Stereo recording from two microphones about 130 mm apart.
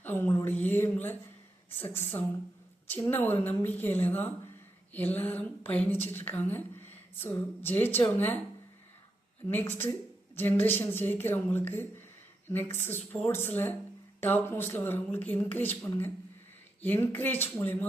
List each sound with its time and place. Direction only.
0.0 s a sound: 15° left (ahead or behind)
1.8 s a woman's voice: 15° left (ahead or behind)
9.5 s a woman's voice: 15° left (ahead or behind)